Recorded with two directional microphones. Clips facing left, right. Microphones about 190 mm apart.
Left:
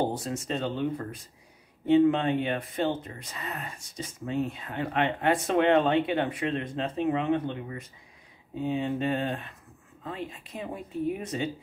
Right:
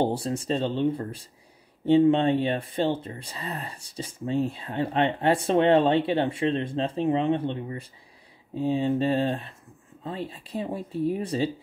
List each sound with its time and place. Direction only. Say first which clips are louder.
0.1 s speech: right 4 dB; 30° right (ahead or behind)